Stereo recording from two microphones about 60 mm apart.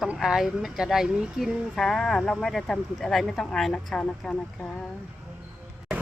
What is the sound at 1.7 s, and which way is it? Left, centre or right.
Speech, centre.